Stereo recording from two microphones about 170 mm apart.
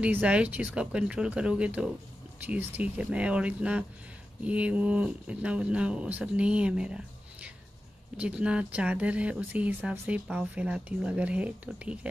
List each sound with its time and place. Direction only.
0.0 s speech: 5° right (ahead or behind)
8.2 s speech: 5° right (ahead or behind)